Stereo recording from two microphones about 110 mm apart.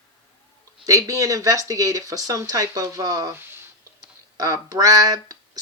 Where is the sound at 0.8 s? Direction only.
30° right (ahead or behind).